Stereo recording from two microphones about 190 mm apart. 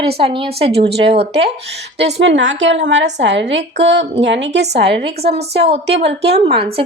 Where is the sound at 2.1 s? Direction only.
70° right (ahead or behind).